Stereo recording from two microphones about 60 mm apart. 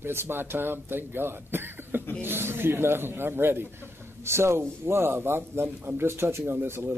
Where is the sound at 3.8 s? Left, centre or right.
Right.